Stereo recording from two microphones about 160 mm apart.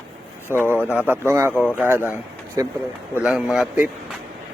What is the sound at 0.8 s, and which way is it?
Mantra, 15° left (ahead or behind).